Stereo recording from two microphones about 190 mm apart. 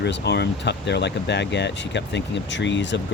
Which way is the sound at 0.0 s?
65° left (ahead or behind).